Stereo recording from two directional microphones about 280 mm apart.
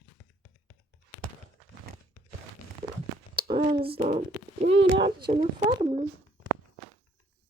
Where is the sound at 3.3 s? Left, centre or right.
Centre.